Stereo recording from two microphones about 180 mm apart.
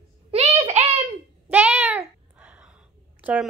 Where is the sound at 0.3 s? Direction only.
35° right (ahead or behind).